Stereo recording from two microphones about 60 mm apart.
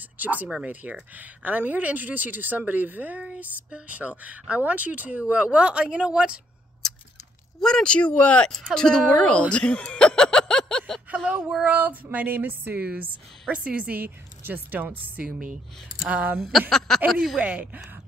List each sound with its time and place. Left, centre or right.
0.2 s speech: right
6.8 s a sound: centre
7.6 s speech: centre
8.5 s speech: centre
9.8 s a sound: centre
11.6 s speech: right
14.0 s speech: right
15.4 s speech: centre
16.1 s speech: right
16.4 s speech: centre
17.4 s speech: right